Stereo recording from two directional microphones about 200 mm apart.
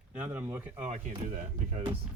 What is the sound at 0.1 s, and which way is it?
Speech, 10° right (ahead or behind).